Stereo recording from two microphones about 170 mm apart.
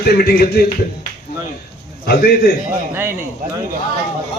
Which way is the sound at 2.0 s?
70° left (ahead or behind).